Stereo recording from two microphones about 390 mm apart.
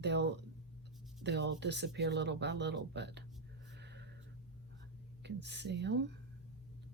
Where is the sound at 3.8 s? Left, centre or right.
Right.